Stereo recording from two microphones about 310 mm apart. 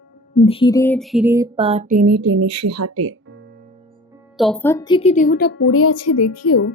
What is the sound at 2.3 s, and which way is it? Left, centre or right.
Speech, right.